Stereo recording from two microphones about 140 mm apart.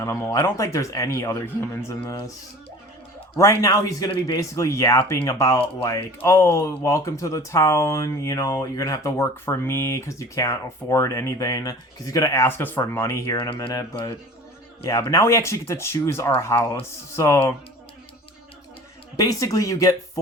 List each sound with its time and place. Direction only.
0.0 s speech: 20° left (ahead or behind)
3.3 s speech: 20° left (ahead or behind)
19.1 s speech: 25° left (ahead or behind)